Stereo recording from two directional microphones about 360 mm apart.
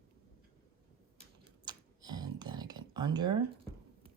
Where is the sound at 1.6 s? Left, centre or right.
Centre.